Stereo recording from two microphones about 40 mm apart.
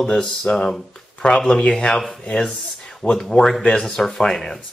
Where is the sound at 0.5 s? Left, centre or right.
Centre.